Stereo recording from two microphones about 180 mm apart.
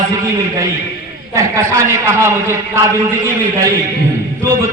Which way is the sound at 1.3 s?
15° right (ahead or behind).